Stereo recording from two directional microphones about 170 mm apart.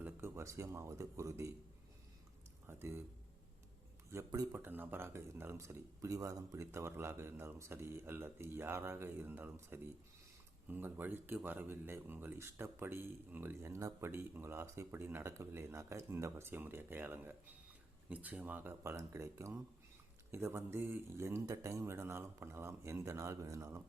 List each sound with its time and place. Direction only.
0.0 s speech: 15° right (ahead or behind)
2.6 s speech: 15° right (ahead or behind)
4.1 s speech: 20° right (ahead or behind)